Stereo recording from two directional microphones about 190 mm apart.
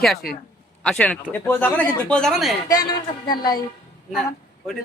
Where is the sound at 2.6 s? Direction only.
20° left (ahead or behind).